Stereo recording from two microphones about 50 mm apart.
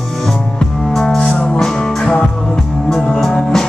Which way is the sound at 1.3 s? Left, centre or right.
Left.